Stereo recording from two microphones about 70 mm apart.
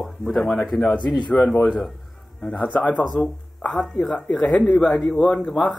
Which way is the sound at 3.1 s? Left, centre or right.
Centre.